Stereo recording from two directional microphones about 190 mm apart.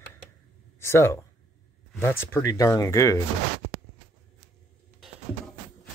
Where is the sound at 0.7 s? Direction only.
15° left (ahead or behind).